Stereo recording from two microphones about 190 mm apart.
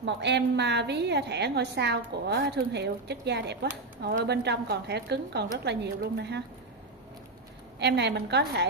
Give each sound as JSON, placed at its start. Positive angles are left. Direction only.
{"t": 0.0, "sound": "a woman's voice", "side_deg": -65}
{"t": 7.8, "sound": "a woman's voice", "side_deg": -60}